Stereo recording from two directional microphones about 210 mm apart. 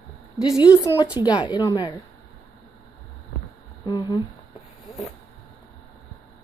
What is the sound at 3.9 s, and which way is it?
Speech, 15° left (ahead or behind).